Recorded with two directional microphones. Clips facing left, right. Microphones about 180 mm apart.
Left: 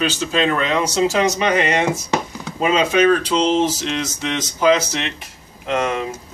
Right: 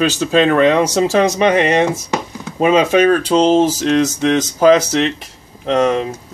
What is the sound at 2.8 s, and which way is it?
Speech, 45° right (ahead or behind).